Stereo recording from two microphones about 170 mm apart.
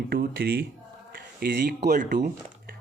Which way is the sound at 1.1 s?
65° right (ahead or behind).